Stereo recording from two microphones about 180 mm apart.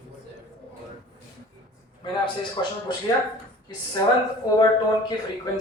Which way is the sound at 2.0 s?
25° left (ahead or behind).